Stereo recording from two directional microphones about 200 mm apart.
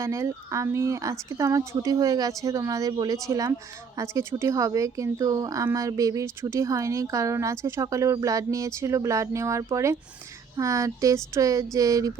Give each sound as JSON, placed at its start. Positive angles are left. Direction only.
{"t": 0.0, "sound": "speech", "side_deg": -15}